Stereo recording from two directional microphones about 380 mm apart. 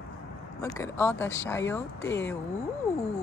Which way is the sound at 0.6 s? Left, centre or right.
Centre.